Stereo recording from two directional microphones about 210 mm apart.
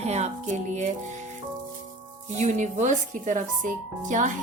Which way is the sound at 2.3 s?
35° right (ahead or behind).